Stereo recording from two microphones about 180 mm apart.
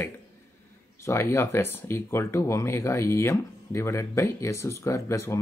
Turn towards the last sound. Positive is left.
turn(degrees=15)  # may be behind; listen again after turning